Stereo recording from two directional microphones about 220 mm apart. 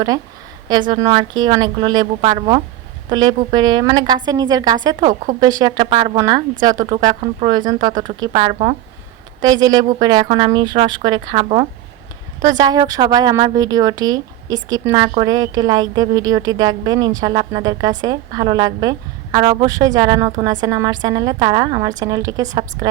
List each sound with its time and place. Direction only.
0.7 s a woman's voice: 20° right (ahead or behind)